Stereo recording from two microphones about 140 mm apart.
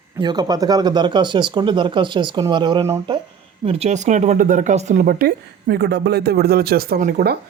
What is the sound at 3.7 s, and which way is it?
Speech, 50° right (ahead or behind).